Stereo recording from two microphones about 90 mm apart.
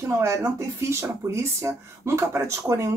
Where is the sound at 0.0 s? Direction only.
30° right (ahead or behind).